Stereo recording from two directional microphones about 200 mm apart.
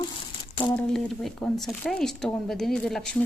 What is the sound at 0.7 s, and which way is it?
Speech, 5° left (ahead or behind).